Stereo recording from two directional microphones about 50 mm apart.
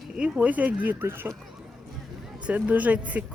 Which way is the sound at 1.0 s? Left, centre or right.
Right.